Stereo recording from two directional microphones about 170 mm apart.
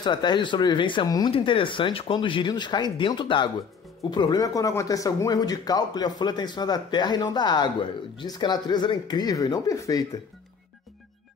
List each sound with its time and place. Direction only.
0.0 s a man's voice: 25° left (ahead or behind)